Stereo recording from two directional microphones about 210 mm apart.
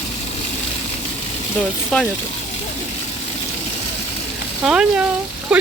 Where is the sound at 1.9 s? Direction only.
5° left (ahead or behind).